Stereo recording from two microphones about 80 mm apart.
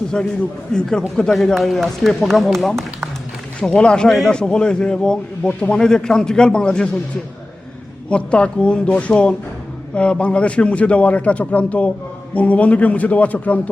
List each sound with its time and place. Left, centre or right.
0.1 s a man's voice: centre
8.1 s a man's voice: centre